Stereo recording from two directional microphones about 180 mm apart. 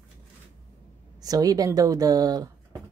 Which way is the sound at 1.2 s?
20° right (ahead or behind).